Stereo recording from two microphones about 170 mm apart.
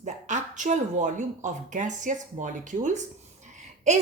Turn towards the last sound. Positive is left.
turn(degrees=-45)  # may be behind; listen again after turning